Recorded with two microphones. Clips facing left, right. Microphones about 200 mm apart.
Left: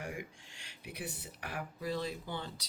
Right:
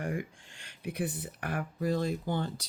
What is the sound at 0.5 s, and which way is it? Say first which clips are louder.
Speech: right 13 dB; 55° right (ahead or behind).